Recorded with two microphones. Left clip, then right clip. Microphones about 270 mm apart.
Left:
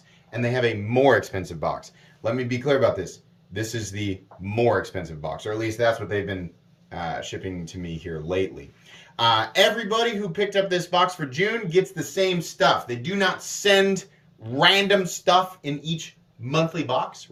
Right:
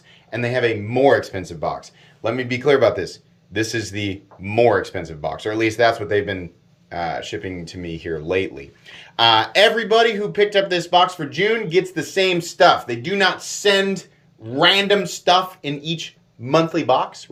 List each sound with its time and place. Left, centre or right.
0.3 s speech: centre
16.5 s speech: centre